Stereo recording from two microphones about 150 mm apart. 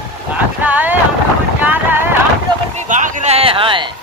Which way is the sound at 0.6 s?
10° right (ahead or behind).